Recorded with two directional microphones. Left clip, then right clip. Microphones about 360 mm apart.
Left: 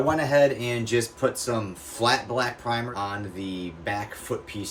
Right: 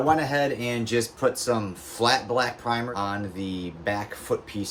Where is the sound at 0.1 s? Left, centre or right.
Centre.